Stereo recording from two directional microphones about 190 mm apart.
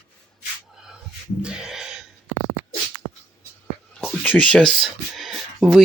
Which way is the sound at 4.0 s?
5° left (ahead or behind).